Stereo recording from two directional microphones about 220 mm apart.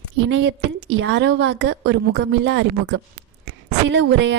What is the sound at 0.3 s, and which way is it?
A woman's voice, 55° right (ahead or behind).